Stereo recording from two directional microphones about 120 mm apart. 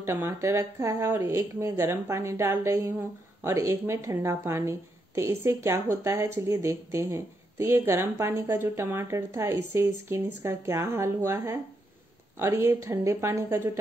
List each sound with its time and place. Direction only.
0.0 s a woman's voice: 20° right (ahead or behind)